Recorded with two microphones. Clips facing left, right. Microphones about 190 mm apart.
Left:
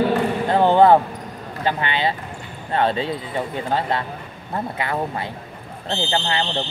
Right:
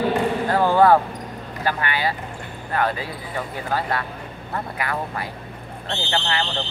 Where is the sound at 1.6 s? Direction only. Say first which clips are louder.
Left 2 dB; 20° left (ahead or behind).